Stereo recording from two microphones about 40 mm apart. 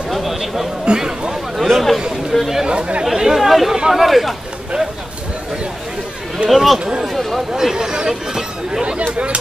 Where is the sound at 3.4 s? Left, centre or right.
Centre.